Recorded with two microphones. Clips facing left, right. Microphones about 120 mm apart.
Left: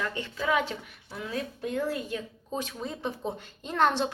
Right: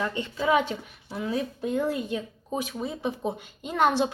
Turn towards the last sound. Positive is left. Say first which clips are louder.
# right 2 dB
turn(degrees=-10)  # may be behind; listen again after turning